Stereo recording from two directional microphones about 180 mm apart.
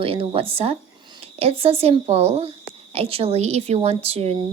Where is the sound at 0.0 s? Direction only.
30° right (ahead or behind).